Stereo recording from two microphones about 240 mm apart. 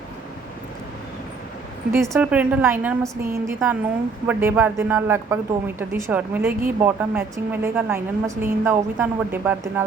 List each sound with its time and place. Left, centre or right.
1.9 s a woman's voice: centre